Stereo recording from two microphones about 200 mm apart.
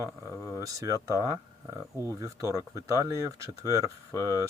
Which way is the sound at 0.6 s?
15° right (ahead or behind).